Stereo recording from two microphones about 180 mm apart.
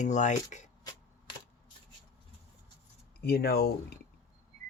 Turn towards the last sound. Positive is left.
turn(degrees=60)  # may be behind; listen again after turning